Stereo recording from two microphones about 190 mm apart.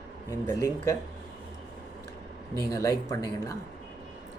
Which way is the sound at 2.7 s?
15° left (ahead or behind).